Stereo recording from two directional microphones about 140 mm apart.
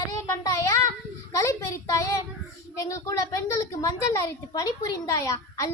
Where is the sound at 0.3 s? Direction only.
20° left (ahead or behind).